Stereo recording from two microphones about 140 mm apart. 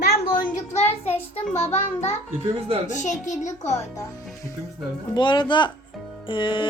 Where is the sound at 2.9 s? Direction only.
60° left (ahead or behind).